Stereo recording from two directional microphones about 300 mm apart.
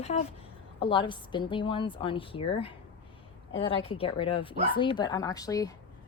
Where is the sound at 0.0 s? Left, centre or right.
Left.